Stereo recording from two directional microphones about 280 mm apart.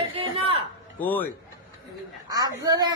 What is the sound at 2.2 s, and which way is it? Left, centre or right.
Speech, centre.